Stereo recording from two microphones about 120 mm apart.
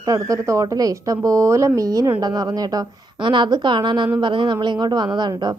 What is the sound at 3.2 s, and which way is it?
A woman's voice, 40° right (ahead or behind).